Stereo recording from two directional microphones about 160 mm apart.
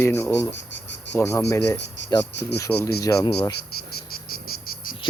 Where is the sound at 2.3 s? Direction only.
90° left.